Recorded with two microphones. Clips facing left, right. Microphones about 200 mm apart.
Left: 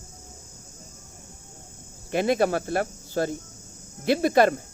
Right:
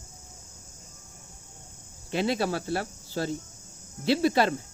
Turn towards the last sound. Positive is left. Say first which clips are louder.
# left 3 dB
turn(degrees=50)  # may be behind; listen again after turning